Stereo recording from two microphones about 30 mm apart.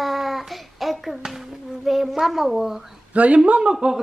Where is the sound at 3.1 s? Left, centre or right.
Right.